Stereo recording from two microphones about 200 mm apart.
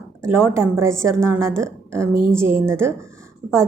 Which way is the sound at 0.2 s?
10° right (ahead or behind).